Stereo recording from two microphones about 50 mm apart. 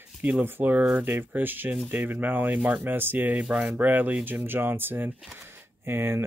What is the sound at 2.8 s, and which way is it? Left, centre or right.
Speech, right.